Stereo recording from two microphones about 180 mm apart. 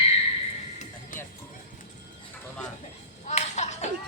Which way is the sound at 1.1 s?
50° left (ahead or behind).